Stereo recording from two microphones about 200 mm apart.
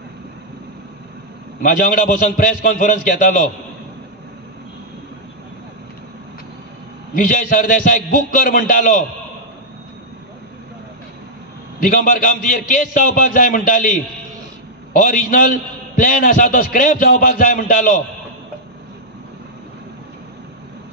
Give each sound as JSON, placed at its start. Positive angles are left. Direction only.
{"t": 1.6, "sound": "a man's voice", "side_deg": 45}
{"t": 7.2, "sound": "a man's voice", "side_deg": 45}
{"t": 11.8, "sound": "a man's voice", "side_deg": 45}